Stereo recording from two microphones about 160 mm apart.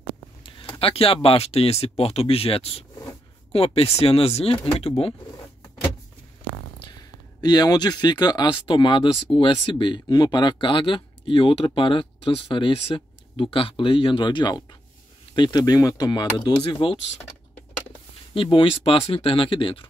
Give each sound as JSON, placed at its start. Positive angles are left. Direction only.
{"t": 0.7, "sound": "speech", "side_deg": 35}
{"t": 6.9, "sound": "speech", "side_deg": 25}
{"t": 18.3, "sound": "speech", "side_deg": 35}